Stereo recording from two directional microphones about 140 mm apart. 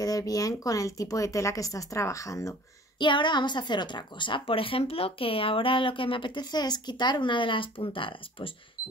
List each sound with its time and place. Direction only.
0.0 s speech: 25° left (ahead or behind)
3.0 s a woman's voice: 35° left (ahead or behind)